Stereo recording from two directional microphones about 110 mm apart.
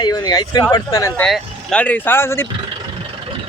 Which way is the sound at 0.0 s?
35° left (ahead or behind).